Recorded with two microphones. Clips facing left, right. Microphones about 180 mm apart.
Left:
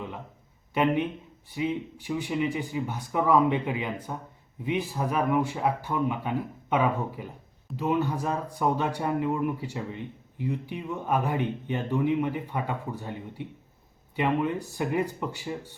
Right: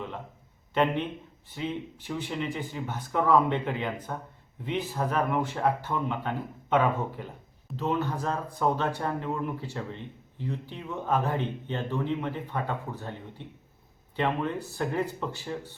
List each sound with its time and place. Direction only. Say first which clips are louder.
0.7 s speech: left 2 dB; 10° left (ahead or behind)